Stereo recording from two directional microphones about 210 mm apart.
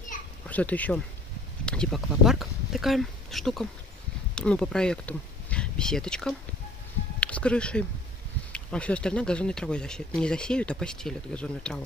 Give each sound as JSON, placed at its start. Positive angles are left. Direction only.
{"t": 0.1, "sound": "children playing", "side_deg": 35}
{"t": 0.5, "sound": "speech", "side_deg": 5}